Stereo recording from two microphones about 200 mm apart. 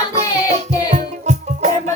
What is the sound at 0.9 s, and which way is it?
Music, 35° right (ahead or behind).